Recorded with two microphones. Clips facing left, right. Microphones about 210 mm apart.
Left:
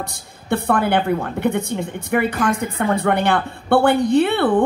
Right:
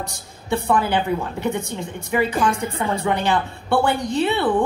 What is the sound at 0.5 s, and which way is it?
A woman's voice, 60° left (ahead or behind).